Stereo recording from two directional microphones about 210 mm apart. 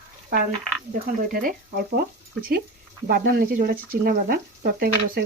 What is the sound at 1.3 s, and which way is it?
Speech, 45° right (ahead or behind).